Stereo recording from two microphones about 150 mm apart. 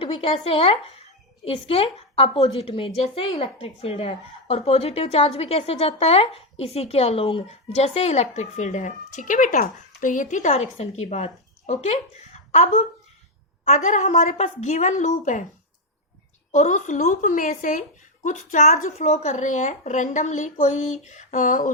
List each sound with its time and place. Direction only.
0.0 s a woman's voice: 35° left (ahead or behind); by 15.4 s 55° left (ahead or behind)
16.5 s speech: 55° left (ahead or behind)